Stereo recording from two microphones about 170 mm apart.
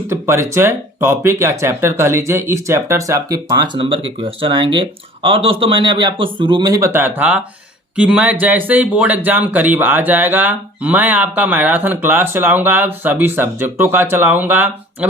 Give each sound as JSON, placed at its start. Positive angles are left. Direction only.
{"t": 0.1, "sound": "speech", "side_deg": -15}